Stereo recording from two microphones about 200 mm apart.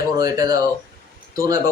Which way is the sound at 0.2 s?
20° right (ahead or behind).